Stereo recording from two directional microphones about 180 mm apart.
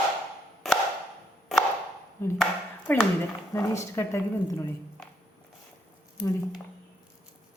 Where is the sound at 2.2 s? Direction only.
15° left (ahead or behind).